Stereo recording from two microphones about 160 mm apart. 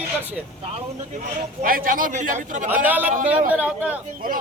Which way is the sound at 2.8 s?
10° right (ahead or behind).